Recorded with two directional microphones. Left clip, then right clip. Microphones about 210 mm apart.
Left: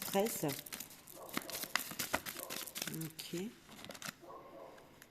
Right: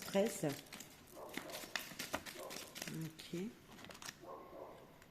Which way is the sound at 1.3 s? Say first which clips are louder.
Left 6 dB; 40° left (ahead or behind).